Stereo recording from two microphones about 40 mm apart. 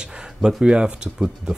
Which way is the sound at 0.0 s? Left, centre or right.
Centre.